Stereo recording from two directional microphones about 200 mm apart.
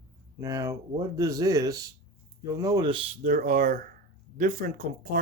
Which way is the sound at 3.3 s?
40° right (ahead or behind).